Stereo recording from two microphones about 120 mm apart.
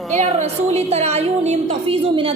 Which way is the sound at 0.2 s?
65° right (ahead or behind).